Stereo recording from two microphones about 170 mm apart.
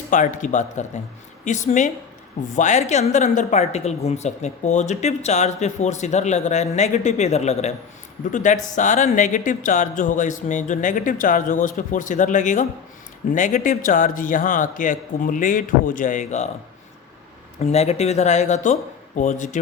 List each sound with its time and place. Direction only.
0.1 s a woman's voice: 50° left (ahead or behind)
17.6 s speech: 40° left (ahead or behind)